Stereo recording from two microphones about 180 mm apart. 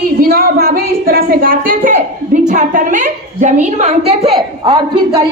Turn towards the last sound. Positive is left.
turn(degrees=-20)  # may be behind; listen again after turning